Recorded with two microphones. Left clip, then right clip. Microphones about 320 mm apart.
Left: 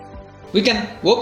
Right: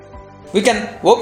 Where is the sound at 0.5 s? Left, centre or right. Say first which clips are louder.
Right 3 dB; right.